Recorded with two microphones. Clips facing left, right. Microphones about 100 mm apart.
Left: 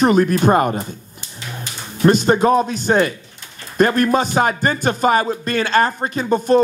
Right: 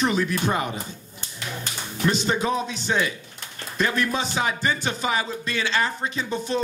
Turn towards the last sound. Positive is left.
turn(degrees=50)  # may be behind; listen again after turning